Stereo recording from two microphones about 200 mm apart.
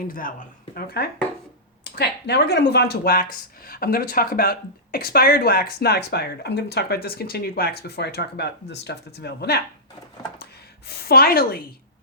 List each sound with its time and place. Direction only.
0.1 s a woman's voice: 45° left (ahead or behind)